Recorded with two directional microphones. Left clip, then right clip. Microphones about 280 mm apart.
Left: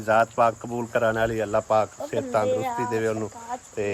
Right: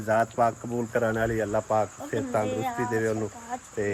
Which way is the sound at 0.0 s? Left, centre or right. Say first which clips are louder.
Left 4 dB; centre.